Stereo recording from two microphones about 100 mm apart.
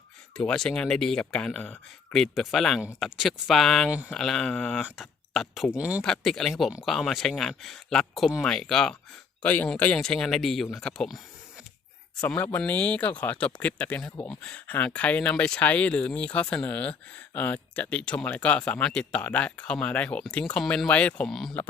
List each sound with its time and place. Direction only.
0.3 s speech: 5° left (ahead or behind)
3.8 s speech: 15° right (ahead or behind)
4.1 s speech: 5° left (ahead or behind)
5.7 s speech: 15° right (ahead or behind)
6.0 s speech: 5° left (ahead or behind)
9.4 s speech: 15° left (ahead or behind)